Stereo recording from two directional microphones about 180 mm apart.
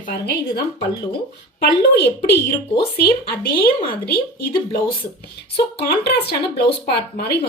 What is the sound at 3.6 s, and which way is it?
Speech, 55° left (ahead or behind).